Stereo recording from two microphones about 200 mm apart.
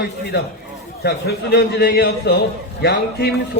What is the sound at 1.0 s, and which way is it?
A man's voice, 55° left (ahead or behind).